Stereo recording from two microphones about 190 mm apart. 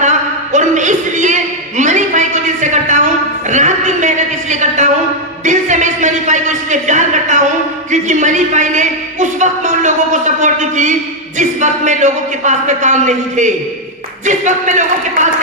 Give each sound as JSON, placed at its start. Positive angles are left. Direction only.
{"t": 0.5, "sound": "music", "side_deg": -40}
{"t": 1.8, "sound": "a sound", "side_deg": -40}
{"t": 11.3, "sound": "speech", "side_deg": -40}